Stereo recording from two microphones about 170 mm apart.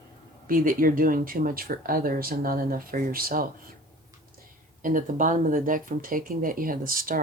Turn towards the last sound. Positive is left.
turn(degrees=-55)  # may be behind; listen again after turning